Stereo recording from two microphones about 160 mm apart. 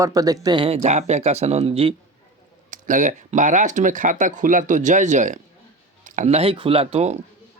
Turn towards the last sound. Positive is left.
turn(degrees=-40)  # may be behind; listen again after turning